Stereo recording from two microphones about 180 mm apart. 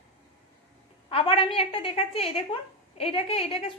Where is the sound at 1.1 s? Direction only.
30° left (ahead or behind).